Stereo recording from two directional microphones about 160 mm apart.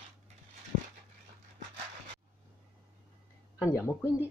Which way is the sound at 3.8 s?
15° left (ahead or behind).